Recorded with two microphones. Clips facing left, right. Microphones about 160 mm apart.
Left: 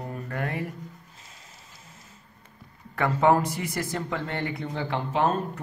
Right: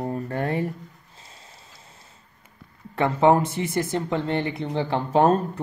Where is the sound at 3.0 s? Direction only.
25° right (ahead or behind).